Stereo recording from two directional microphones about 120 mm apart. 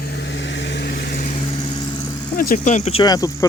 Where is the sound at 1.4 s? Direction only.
40° left (ahead or behind).